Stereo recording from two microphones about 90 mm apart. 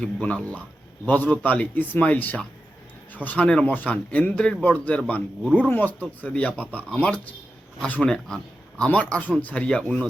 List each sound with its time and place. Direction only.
0.0 s speech: 10° left (ahead or behind)